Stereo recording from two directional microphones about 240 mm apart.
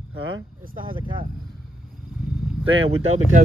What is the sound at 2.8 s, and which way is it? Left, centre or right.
Speech, right.